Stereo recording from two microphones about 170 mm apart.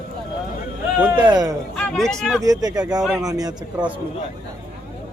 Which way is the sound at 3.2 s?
20° right (ahead or behind).